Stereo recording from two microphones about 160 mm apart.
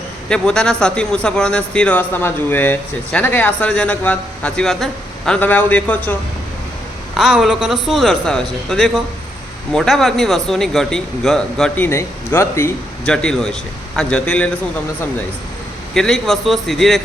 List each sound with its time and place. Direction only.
0.3 s a man's voice: 5° left (ahead or behind)
7.2 s a man's voice: centre (ahead or behind)
11.9 s a man's voice: 15° left (ahead or behind)
13.1 s a man's voice: 5° left (ahead or behind)
16.0 s a man's voice: centre (ahead or behind)